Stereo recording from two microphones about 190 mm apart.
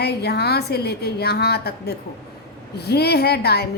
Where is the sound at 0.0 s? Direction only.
60° left (ahead or behind).